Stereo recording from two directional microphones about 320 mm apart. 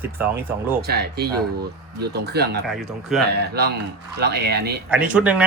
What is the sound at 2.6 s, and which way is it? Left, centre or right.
Speech, centre.